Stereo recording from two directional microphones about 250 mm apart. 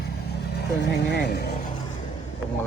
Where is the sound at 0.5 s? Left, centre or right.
Left.